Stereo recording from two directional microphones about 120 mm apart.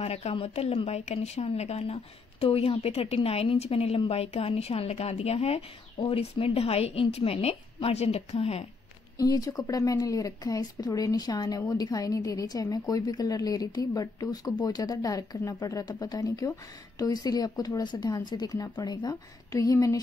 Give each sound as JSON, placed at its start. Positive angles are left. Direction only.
{"t": 0.0, "sound": "a woman's voice", "side_deg": 60}
{"t": 9.2, "sound": "speech", "side_deg": 30}